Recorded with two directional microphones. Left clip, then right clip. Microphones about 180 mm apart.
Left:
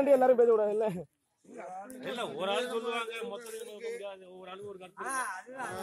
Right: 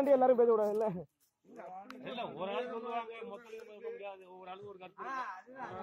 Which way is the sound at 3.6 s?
25° right (ahead or behind).